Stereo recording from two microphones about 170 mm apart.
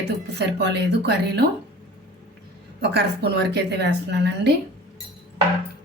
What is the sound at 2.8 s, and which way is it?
A woman's voice, 75° right (ahead or behind).